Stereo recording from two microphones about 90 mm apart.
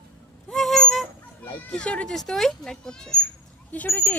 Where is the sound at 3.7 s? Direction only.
20° left (ahead or behind).